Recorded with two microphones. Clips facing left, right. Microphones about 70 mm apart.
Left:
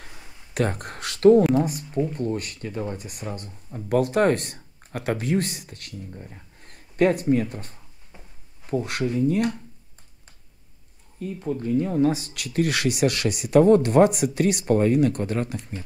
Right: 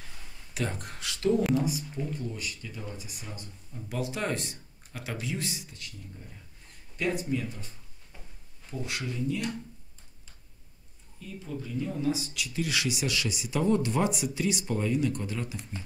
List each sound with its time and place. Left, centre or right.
0.6 s speech: left
11.1 s speech: left